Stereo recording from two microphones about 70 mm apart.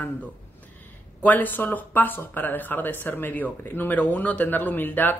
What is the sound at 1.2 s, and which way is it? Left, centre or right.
Speech, left.